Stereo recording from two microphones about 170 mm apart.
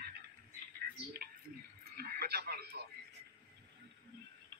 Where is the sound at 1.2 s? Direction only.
65° right (ahead or behind).